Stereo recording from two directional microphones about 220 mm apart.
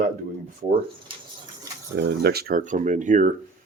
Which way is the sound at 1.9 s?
45° right (ahead or behind).